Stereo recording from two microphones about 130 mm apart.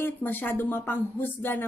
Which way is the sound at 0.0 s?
15° left (ahead or behind).